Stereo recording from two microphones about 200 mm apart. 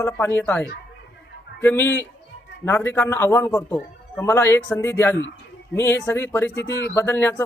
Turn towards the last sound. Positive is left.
turn(degrees=10)  # may be behind; listen again after turning